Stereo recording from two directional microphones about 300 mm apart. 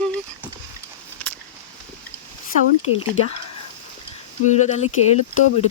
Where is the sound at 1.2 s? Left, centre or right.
Centre.